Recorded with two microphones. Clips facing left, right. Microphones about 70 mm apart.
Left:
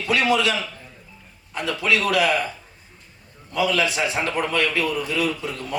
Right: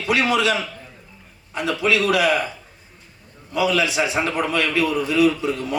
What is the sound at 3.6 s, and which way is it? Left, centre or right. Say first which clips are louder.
Speech: right 2 dB; left.